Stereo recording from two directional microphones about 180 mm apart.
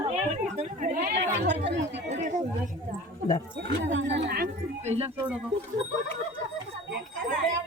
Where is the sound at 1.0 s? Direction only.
70° right (ahead or behind).